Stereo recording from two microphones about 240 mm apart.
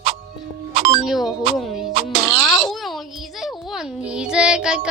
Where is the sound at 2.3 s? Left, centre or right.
Centre.